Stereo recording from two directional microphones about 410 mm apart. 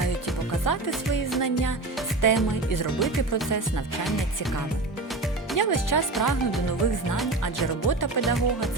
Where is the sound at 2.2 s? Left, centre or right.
Left.